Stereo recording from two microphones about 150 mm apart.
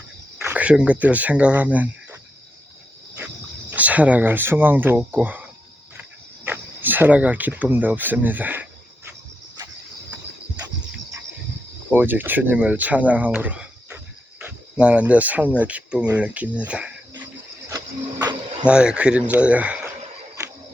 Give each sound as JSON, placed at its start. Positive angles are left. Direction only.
{"t": 0.4, "sound": "speech", "side_deg": -10}
{"t": 3.7, "sound": "speech", "side_deg": -10}
{"t": 11.9, "sound": "speech", "side_deg": -10}
{"t": 17.7, "sound": "printer", "side_deg": -25}
{"t": 18.6, "sound": "speech", "side_deg": -5}